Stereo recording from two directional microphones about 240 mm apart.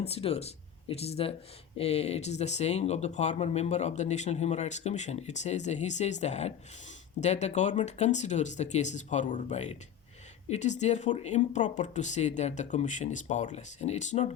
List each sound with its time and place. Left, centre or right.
0.0 s speech: left